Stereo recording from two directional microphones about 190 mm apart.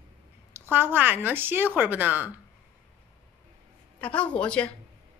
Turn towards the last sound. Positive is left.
turn(degrees=5)  # may be behind; listen again after turning